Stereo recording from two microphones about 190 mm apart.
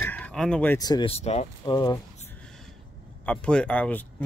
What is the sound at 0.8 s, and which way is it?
Speech, 20° left (ahead or behind).